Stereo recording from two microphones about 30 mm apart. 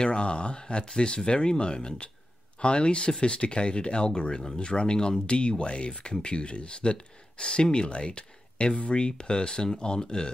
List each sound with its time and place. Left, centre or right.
0.0 s speech: left